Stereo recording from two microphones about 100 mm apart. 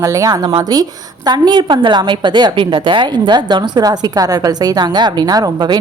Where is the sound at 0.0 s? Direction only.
35° right (ahead or behind).